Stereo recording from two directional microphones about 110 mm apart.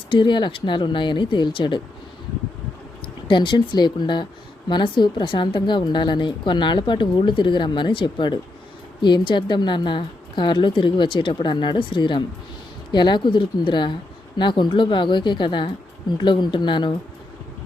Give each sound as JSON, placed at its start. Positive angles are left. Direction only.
{"t": 0.1, "sound": "a woman's voice", "side_deg": 45}
{"t": 3.2, "sound": "a woman's voice", "side_deg": 45}